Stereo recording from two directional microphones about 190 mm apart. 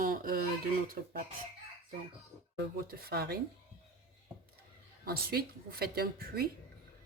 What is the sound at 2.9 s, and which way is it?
Speech, 55° right (ahead or behind).